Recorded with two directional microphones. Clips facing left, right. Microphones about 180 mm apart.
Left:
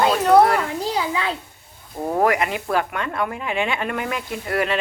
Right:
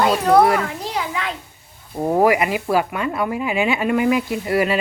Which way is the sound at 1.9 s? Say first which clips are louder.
Right 3 dB; 15° right (ahead or behind).